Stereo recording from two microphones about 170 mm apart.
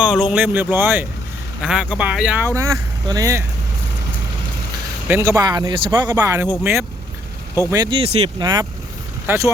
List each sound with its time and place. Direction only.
0.0 s speech: 5° right (ahead or behind)
2.6 s speech: 20° right (ahead or behind)
5.0 s speech: 15° right (ahead or behind)
7.7 s speech: 20° right (ahead or behind)
7.9 s speech: 35° right (ahead or behind)
8.4 s speech: 25° right (ahead or behind)